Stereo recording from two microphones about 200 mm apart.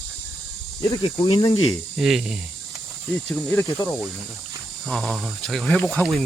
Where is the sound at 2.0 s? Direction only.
Centre (ahead or behind).